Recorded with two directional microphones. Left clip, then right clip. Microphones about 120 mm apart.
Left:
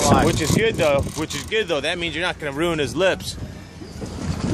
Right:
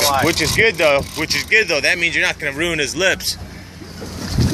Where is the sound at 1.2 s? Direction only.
30° left (ahead or behind); by 3.1 s 45° left (ahead or behind).